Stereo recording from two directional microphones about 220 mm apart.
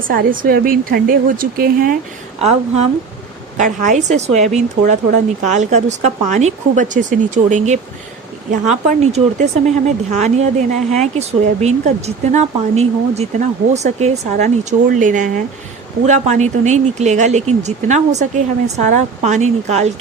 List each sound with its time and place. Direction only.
0.1 s speech: 40° right (ahead or behind)
2.4 s a woman's voice: 30° right (ahead or behind)